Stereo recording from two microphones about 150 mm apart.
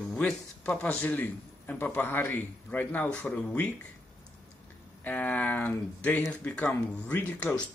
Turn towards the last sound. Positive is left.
turn(degrees=10)  # may be behind; listen again after turning